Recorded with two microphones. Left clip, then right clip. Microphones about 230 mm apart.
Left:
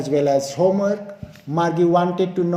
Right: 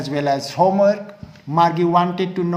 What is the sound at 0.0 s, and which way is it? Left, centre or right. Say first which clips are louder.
Speech: left 2 dB; centre.